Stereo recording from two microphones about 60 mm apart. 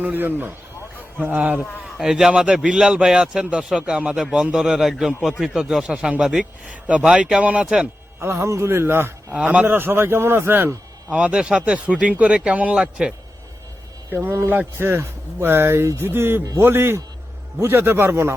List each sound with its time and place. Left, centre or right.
0.0 s speech: right
2.0 s speech: centre
6.4 s speech: right
8.2 s a man's voice: right
9.3 s speech: centre
9.6 s speech: right
11.1 s speech: centre
14.1 s a man's voice: right